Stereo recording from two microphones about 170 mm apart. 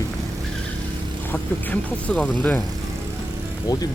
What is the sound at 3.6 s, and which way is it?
Speech, 20° left (ahead or behind).